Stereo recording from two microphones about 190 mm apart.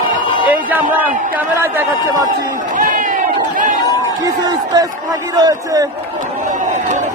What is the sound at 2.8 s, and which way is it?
Crowd, 45° right (ahead or behind).